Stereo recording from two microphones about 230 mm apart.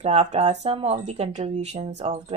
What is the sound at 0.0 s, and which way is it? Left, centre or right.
Insect, right.